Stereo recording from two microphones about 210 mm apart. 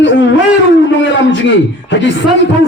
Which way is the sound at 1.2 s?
60° left (ahead or behind).